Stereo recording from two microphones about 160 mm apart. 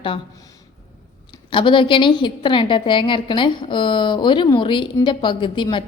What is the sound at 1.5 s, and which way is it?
A woman's voice, 30° left (ahead or behind).